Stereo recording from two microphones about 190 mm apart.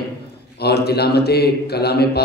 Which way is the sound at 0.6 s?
60° left (ahead or behind).